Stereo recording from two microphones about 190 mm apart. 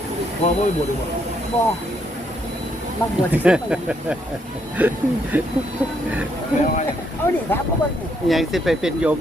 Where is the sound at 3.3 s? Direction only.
5° right (ahead or behind).